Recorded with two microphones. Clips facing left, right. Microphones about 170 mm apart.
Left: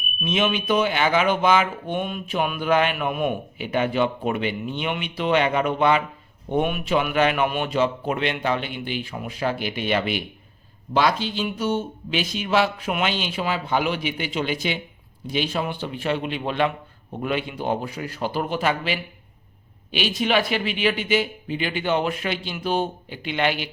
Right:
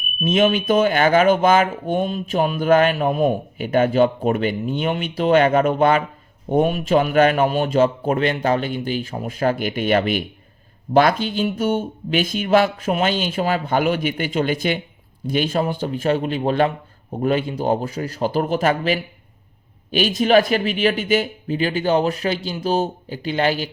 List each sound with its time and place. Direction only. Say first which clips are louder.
0.2 s a man's voice: right 6 dB; 45° right (ahead or behind)